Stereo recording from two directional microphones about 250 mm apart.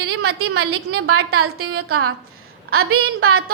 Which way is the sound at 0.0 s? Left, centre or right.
Right.